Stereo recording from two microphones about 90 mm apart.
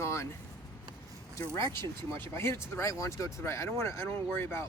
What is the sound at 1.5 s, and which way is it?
Speech, 30° left (ahead or behind).